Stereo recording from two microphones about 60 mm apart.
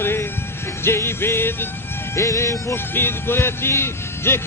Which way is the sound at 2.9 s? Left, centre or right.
Left.